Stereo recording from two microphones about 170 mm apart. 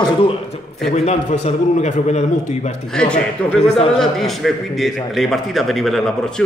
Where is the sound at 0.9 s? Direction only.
40° left (ahead or behind).